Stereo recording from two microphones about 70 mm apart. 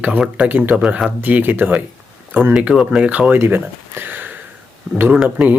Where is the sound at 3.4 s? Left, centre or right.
Right.